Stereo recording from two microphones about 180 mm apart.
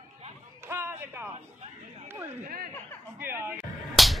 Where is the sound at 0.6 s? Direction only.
15° right (ahead or behind).